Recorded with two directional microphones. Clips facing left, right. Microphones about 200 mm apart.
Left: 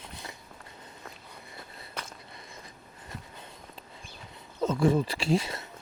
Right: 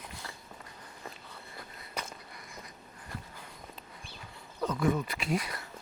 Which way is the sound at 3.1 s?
25° left (ahead or behind).